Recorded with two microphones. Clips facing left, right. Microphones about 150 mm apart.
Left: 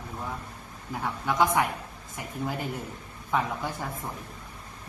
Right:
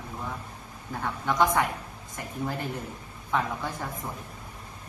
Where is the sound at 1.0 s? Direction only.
5° left (ahead or behind).